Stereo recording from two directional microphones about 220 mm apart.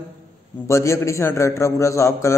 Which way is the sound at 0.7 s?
15° left (ahead or behind).